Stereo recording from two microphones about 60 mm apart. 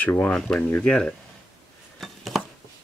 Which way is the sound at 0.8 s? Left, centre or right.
Centre.